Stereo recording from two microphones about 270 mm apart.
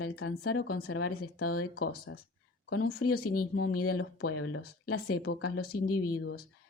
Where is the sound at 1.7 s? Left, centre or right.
Left.